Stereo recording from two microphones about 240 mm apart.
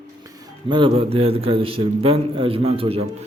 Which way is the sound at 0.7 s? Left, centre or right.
Right.